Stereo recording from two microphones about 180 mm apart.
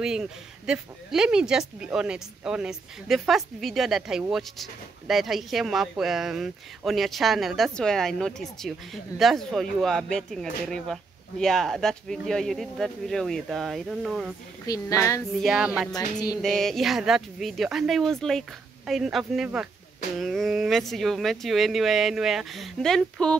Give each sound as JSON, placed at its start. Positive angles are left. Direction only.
{"t": 0.0, "sound": "speech", "side_deg": -5}
{"t": 14.7, "sound": "speech", "side_deg": 20}
{"t": 15.3, "sound": "speech", "side_deg": 0}
{"t": 15.9, "sound": "music", "side_deg": 20}
{"t": 16.3, "sound": "speech", "side_deg": 0}